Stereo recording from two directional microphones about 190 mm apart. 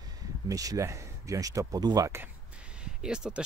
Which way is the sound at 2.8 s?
5° right (ahead or behind).